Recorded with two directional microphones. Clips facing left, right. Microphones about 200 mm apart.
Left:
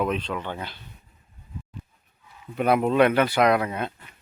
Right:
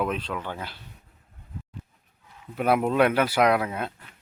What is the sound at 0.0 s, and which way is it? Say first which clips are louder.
Speech: left 2 dB; 5° right (ahead or behind).